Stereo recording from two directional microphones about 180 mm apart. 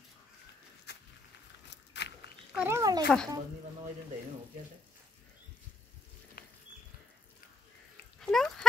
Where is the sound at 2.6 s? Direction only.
15° right (ahead or behind).